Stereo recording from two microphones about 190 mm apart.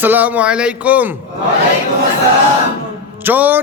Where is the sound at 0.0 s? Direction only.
10° right (ahead or behind).